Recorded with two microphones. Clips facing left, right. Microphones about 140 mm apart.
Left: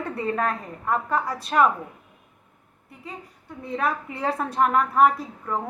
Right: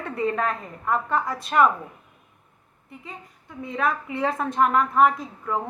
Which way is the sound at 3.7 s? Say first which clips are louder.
Right 1 dB; 35° left (ahead or behind).